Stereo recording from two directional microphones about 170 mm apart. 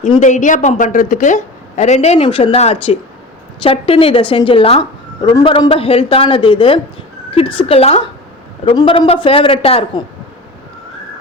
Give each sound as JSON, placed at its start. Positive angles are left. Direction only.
{"t": 0.2, "sound": "a woman's voice", "side_deg": 45}